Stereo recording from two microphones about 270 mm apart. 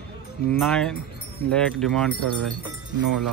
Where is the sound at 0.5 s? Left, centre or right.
Centre.